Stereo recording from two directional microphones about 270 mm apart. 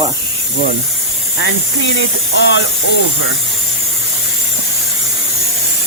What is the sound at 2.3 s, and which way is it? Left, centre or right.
Speech, left.